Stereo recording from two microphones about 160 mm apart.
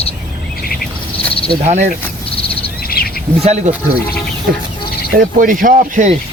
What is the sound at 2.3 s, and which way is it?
Bird, 35° left (ahead or behind).